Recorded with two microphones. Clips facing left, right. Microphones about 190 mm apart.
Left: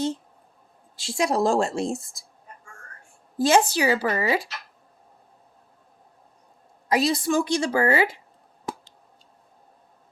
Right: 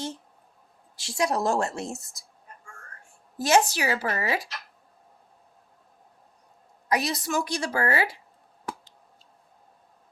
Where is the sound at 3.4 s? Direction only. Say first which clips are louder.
Left 3 dB; 30° left (ahead or behind).